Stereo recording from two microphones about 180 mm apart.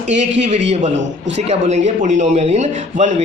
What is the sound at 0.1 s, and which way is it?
A man's voice, 40° right (ahead or behind).